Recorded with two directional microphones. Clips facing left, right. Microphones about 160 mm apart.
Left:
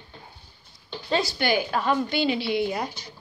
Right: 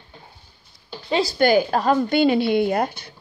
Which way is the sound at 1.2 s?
45° right (ahead or behind).